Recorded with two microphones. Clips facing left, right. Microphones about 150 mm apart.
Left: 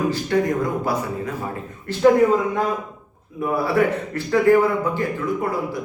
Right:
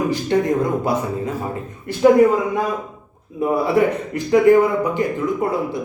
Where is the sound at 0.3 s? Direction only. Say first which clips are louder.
Right 2 dB; 20° right (ahead or behind).